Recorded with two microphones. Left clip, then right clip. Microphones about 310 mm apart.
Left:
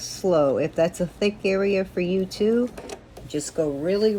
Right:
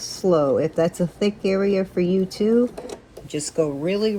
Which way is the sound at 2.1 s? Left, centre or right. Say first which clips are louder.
Even; right.